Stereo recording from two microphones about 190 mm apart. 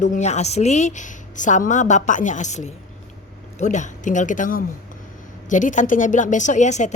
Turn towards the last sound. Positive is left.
turn(degrees=40)  # may be behind; listen again after turning